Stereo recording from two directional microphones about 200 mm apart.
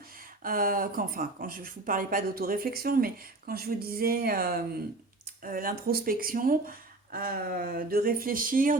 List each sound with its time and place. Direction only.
0.4 s speech: 45° right (ahead or behind)